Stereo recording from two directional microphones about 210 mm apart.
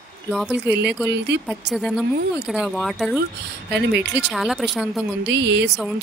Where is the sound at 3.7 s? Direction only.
55° right (ahead or behind).